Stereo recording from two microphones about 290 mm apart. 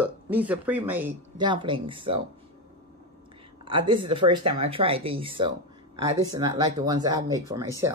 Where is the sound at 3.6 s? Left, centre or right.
Centre.